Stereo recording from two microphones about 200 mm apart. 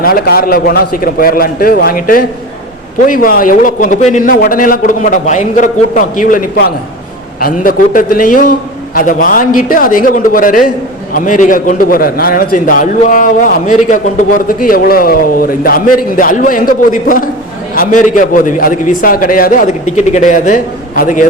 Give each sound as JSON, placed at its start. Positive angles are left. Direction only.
{"t": 0.0, "sound": "a man's voice", "side_deg": 50}